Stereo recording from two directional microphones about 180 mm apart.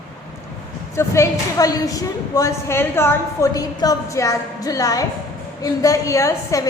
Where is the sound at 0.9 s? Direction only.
15° left (ahead or behind).